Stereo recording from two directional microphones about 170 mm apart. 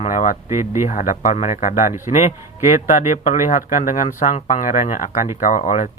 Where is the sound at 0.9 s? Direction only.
50° left (ahead or behind).